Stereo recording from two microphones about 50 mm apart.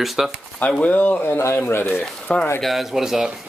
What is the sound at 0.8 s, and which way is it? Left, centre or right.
Speech, left.